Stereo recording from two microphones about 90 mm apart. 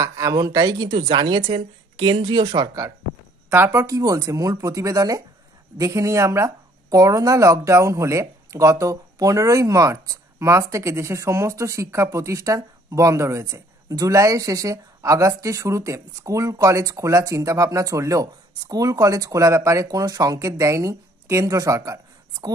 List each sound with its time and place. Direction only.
0.0 s speech: 40° right (ahead or behind)
0.8 s speech: 70° right (ahead or behind)
3.4 s speech: 25° right (ahead or behind)
3.8 s speech: 45° right (ahead or behind)